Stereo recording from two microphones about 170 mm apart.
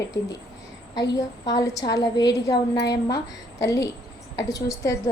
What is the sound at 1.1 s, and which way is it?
A woman's voice, 20° left (ahead or behind).